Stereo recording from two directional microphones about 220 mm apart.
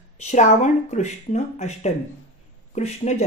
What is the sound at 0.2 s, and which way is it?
Speech, 30° left (ahead or behind).